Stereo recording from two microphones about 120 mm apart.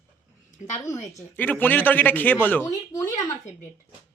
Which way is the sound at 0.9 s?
25° left (ahead or behind).